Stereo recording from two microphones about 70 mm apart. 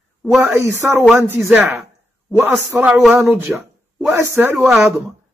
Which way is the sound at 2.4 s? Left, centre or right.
Right.